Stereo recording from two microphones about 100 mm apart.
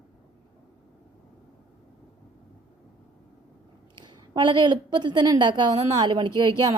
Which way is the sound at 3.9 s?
50° right (ahead or behind).